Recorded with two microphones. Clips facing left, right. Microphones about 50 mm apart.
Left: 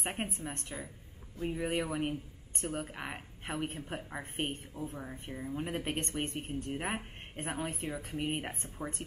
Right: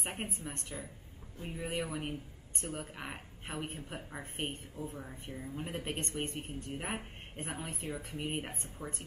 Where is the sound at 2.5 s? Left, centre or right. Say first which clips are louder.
Left 4 dB; left.